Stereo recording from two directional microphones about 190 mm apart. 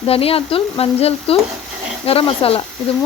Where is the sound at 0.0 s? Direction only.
30° left (ahead or behind).